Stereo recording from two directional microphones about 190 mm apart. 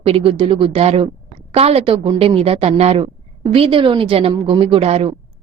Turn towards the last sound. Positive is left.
turn(degrees=-30)  # may be behind; listen again after turning